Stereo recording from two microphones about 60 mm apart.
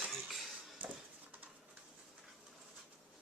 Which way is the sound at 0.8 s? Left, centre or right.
Right.